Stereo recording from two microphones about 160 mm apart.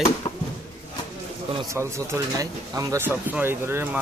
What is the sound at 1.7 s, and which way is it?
Speech, 20° right (ahead or behind).